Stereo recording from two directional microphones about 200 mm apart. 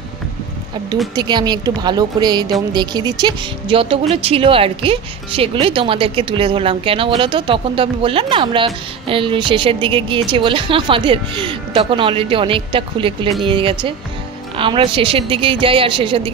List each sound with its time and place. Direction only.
1.1 s a woman's voice: 20° right (ahead or behind)